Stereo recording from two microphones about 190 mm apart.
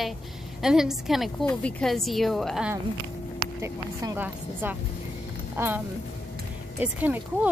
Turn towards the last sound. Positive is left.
turn(degrees=-10)  # may be behind; listen again after turning